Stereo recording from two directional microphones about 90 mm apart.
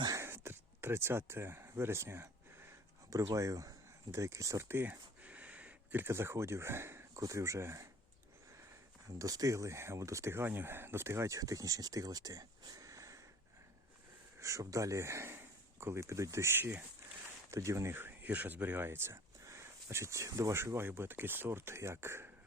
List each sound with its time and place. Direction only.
0.2 s a sound: 30° right (ahead or behind)
3.1 s speech: 35° right (ahead or behind)
9.0 s speech: 40° right (ahead or behind)
14.3 s speech: 35° right (ahead or behind)